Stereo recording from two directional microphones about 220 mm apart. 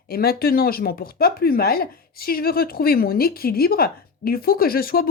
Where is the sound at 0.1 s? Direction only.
45° left (ahead or behind).